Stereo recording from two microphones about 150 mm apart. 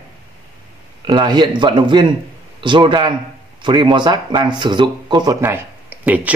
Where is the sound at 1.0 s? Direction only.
30° right (ahead or behind).